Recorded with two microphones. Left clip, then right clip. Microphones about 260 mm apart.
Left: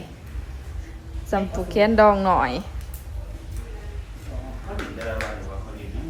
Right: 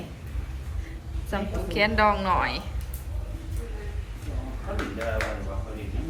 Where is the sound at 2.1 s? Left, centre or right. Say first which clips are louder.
Left 5 dB; left.